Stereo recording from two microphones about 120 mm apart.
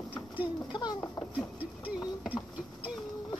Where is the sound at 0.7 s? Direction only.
35° left (ahead or behind).